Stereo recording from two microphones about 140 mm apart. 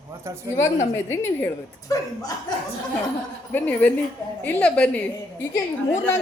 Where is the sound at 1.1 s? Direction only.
20° left (ahead or behind).